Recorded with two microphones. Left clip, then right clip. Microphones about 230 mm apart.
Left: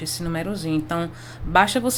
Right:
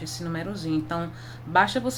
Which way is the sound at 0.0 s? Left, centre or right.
Left.